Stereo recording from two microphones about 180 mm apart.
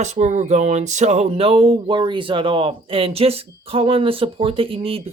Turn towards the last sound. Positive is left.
turn(degrees=-30)  # may be behind; listen again after turning